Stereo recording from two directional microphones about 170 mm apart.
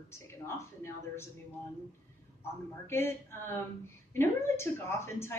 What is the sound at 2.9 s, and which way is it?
A woman's voice, 15° left (ahead or behind).